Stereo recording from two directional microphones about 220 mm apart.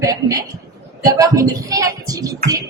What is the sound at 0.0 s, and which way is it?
A woman's voice, 15° right (ahead or behind).